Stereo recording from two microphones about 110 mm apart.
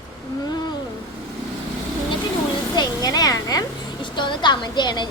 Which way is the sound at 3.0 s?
35° left (ahead or behind).